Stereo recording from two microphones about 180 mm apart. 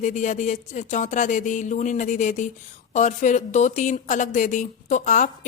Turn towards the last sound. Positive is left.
turn(degrees=45)  # may be behind; listen again after turning